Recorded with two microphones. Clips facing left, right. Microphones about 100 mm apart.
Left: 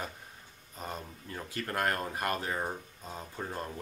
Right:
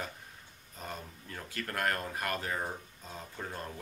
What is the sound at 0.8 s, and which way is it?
Speech, 20° left (ahead or behind).